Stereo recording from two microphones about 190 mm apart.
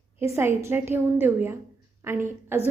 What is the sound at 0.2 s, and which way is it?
A woman's voice, 15° right (ahead or behind).